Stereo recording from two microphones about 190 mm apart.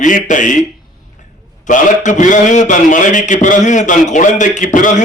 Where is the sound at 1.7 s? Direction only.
40° left (ahead or behind).